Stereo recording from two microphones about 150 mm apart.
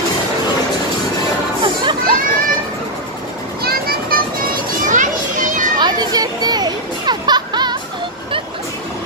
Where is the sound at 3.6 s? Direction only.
85° right.